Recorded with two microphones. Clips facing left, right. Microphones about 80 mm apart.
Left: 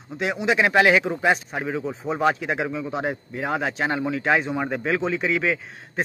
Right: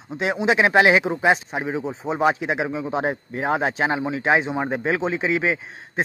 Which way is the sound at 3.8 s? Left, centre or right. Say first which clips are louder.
Right 1 dB; centre.